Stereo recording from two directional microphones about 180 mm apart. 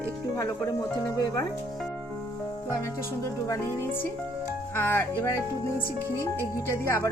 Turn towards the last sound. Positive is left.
turn(degrees=15)  # may be behind; listen again after turning